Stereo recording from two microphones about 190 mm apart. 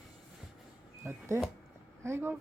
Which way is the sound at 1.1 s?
15° right (ahead or behind).